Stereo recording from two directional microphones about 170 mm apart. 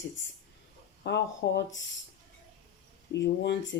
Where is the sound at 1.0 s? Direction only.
90° left.